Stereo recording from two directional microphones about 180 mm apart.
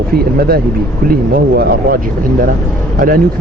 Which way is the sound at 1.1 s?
55° right (ahead or behind).